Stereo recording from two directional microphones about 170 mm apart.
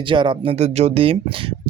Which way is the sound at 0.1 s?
30° right (ahead or behind).